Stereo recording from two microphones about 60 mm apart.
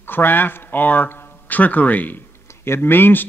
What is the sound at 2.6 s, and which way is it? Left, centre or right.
Speech, left.